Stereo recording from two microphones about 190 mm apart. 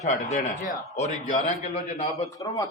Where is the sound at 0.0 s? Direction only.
40° left (ahead or behind).